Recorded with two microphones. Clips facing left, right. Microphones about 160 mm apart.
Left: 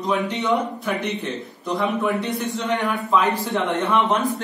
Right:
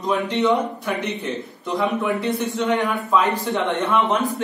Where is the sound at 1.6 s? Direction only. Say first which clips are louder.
Even; centre (ahead or behind).